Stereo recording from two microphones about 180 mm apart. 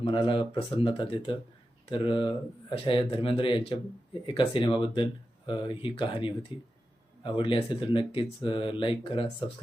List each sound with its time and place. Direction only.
0.0 s speech: 30° left (ahead or behind)